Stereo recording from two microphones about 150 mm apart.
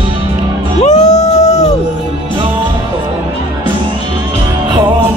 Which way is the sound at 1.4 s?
25° left (ahead or behind).